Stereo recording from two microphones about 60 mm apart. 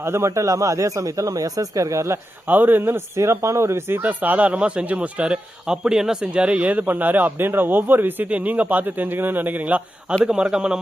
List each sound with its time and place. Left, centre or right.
0.0 s speech: right
0.3 s speech: right
2.5 s a man's voice: right
3.2 s speech: right
4.0 s speech: right
10.2 s a man's voice: centre